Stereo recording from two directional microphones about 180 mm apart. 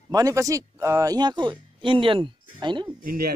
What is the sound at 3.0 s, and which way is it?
Speech, 55° right (ahead or behind).